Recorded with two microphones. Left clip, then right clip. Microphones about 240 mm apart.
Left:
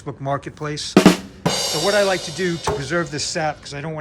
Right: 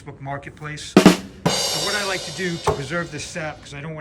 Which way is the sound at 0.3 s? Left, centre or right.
Centre.